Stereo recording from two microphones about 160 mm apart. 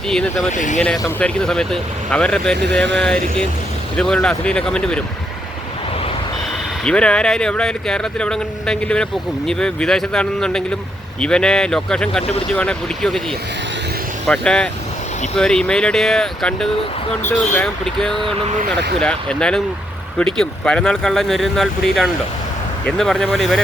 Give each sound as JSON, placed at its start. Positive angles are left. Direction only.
{"t": 0.1, "sound": "speech", "side_deg": 5}
{"t": 0.5, "sound": "speech", "side_deg": 50}
{"t": 1.2, "sound": "speech", "side_deg": 5}
{"t": 6.8, "sound": "speech", "side_deg": 5}
{"t": 14.3, "sound": "speech", "side_deg": 5}